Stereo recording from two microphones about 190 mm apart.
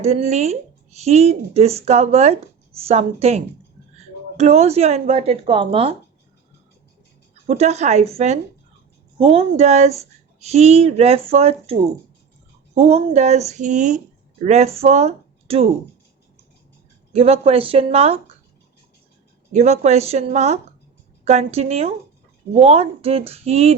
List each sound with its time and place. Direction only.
0.0 s speech: 35° right (ahead or behind)
7.4 s speech: 35° right (ahead or behind)
17.1 s speech: 30° right (ahead or behind)
19.5 s speech: 35° right (ahead or behind)